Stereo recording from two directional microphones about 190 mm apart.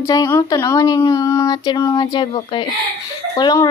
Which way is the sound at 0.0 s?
20° left (ahead or behind).